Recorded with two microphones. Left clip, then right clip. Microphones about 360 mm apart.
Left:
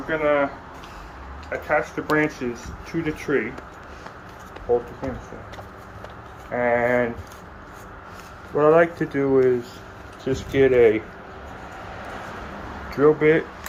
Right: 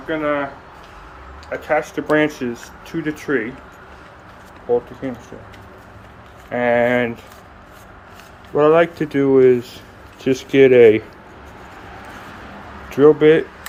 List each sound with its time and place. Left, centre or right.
0.1 s speech: centre
1.5 s speech: right
6.5 s speech: right
8.5 s speech: right
12.9 s speech: right